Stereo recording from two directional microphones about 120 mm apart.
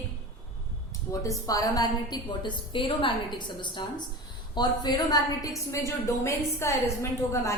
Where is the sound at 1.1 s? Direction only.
25° left (ahead or behind).